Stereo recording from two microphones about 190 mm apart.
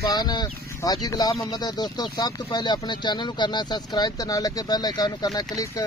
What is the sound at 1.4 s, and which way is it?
Speech, 20° left (ahead or behind).